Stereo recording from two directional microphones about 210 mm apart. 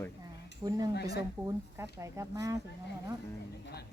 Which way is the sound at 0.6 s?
20° right (ahead or behind).